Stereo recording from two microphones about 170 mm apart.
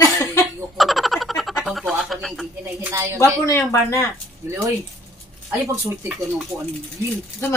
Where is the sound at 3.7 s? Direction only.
15° left (ahead or behind).